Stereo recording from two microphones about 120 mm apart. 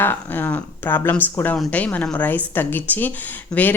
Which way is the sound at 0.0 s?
20° left (ahead or behind).